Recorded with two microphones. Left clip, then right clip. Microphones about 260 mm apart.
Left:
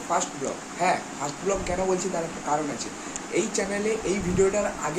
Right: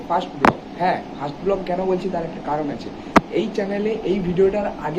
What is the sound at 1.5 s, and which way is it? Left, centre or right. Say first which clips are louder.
Speech: right 6 dB; centre.